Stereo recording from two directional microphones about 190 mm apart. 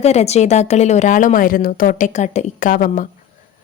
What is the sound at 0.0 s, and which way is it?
Speech, 35° left (ahead or behind).